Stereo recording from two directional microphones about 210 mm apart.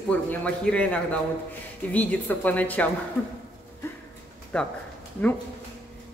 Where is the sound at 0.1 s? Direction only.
5° left (ahead or behind).